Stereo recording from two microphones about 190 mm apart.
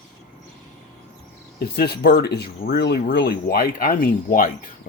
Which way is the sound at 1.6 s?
55° left (ahead or behind).